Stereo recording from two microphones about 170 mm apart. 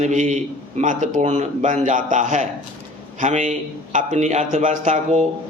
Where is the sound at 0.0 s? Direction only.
45° right (ahead or behind).